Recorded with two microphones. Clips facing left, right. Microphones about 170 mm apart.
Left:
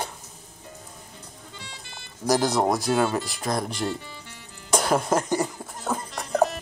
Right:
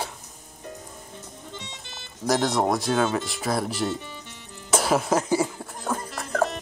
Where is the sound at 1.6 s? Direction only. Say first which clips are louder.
Right 1 dB; 20° right (ahead or behind).